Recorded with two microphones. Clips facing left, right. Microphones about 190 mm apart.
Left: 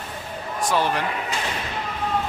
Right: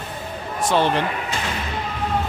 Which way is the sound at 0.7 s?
25° right (ahead or behind).